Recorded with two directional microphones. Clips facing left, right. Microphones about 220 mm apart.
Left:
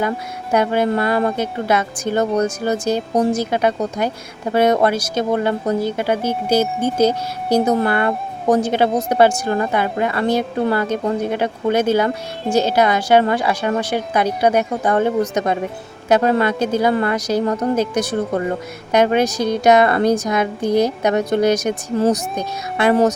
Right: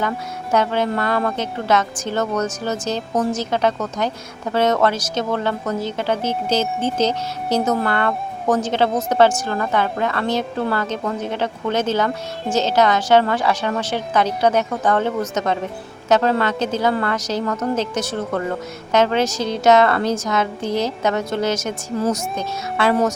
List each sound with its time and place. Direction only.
0.5 s speech: 10° left (ahead or behind)